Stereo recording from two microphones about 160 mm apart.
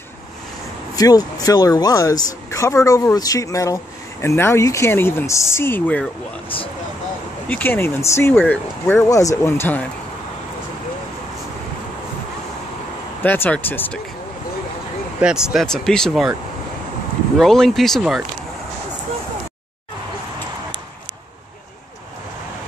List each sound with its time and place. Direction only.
0.9 s speech: 20° left (ahead or behind)
7.4 s speech: 10° left (ahead or behind)
13.2 s speech: 10° left (ahead or behind)
15.1 s speech: 5° right (ahead or behind)
17.4 s speech: centre (ahead or behind)